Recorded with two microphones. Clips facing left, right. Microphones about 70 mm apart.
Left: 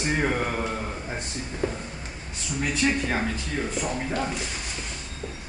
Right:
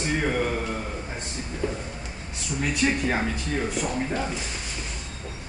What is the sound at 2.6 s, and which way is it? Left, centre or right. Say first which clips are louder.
Speech: right 1 dB; centre.